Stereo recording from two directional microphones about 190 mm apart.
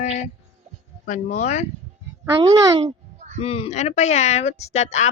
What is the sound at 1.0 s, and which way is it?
Speech, 40° left (ahead or behind).